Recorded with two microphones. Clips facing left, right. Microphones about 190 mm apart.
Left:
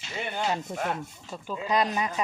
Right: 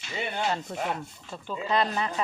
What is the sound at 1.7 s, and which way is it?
Speech, 15° left (ahead or behind).